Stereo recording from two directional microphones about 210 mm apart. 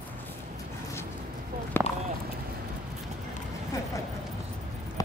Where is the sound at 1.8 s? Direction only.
10° left (ahead or behind).